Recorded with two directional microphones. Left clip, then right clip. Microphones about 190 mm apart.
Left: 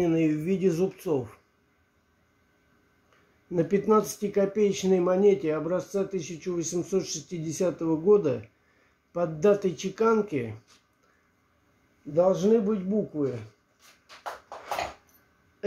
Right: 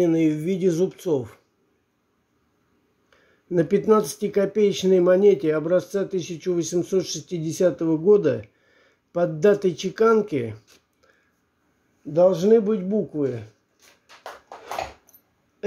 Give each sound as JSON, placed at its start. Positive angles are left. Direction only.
{"t": 0.0, "sound": "speech", "side_deg": -20}
{"t": 3.4, "sound": "speech", "side_deg": -25}
{"t": 12.1, "sound": "speech", "side_deg": -30}